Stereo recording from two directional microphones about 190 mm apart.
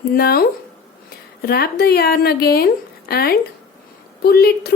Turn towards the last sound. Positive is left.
turn(degrees=55)  # may be behind; listen again after turning